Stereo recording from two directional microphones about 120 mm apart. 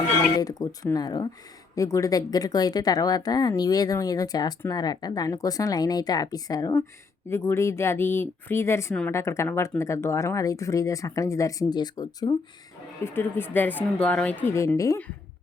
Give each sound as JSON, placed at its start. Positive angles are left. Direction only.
{"t": 0.3, "sound": "a woman's voice", "side_deg": 30}
{"t": 7.3, "sound": "speech", "side_deg": 20}
{"t": 13.1, "sound": "a woman's voice", "side_deg": 20}